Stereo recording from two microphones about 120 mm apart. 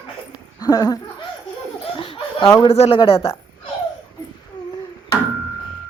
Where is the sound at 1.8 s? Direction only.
50° left (ahead or behind).